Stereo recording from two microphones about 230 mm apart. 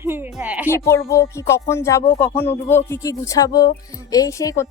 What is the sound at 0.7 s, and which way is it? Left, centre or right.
Speech, centre.